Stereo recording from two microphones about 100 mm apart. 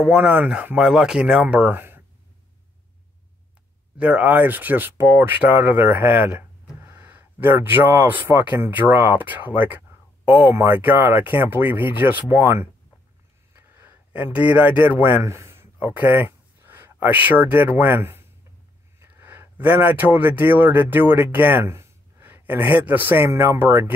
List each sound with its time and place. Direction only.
0.0 s speech: 10° right (ahead or behind)
4.0 s speech: 15° right (ahead or behind)
10.5 s speech: 30° right (ahead or behind)
15.2 s speech: 30° right (ahead or behind)